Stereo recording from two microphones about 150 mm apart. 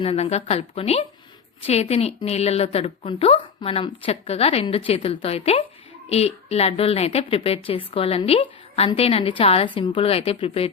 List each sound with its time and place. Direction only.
0.0 s a woman's voice: 45° left (ahead or behind)